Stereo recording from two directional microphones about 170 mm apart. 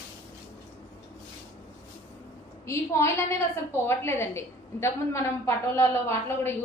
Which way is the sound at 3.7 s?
15° left (ahead or behind).